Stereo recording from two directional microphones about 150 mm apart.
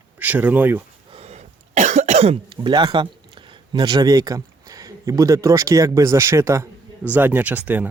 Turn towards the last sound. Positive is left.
turn(degrees=-10)  # may be behind; listen again after turning